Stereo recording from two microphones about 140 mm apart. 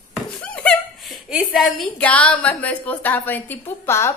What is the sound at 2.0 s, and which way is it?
A woman's voice, 10° left (ahead or behind).